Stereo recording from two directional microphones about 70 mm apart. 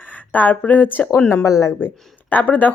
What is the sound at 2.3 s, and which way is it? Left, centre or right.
Speech, left.